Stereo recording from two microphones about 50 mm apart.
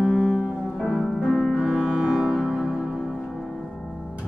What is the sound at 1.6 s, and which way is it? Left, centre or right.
Music, centre.